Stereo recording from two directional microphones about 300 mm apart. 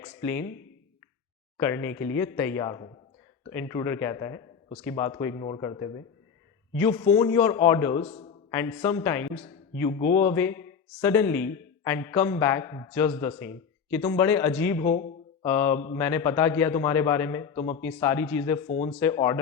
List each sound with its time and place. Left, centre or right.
0.0 s speech: centre
1.5 s speech: centre
18.9 s speech: centre